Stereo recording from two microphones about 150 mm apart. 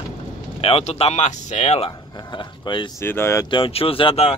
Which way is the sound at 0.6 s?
45° left (ahead or behind).